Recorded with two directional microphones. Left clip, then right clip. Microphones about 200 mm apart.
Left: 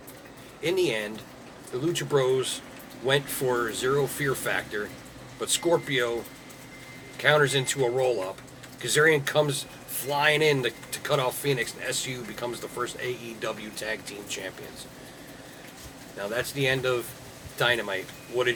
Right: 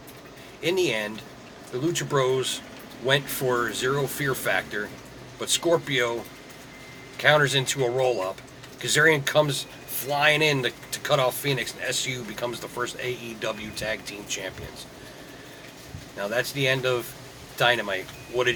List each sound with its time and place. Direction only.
0.6 s speech: 10° right (ahead or behind)
7.2 s speech: 15° right (ahead or behind)
16.1 s speech: 15° right (ahead or behind)